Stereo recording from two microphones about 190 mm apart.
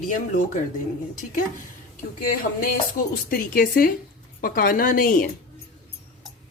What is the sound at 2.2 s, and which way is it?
A woman's voice, 50° left (ahead or behind).